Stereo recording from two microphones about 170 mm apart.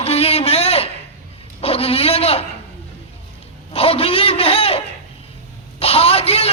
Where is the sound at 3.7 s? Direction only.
35° left (ahead or behind).